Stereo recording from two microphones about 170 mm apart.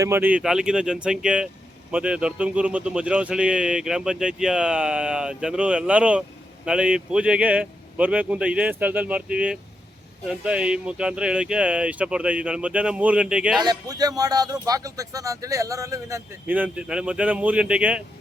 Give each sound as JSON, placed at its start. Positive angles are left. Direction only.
{"t": 0.0, "sound": "a man's voice", "side_deg": -10}
{"t": 13.6, "sound": "speech", "side_deg": -25}